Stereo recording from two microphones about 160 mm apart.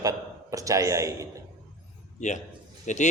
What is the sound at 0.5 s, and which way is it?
Speech, 20° right (ahead or behind).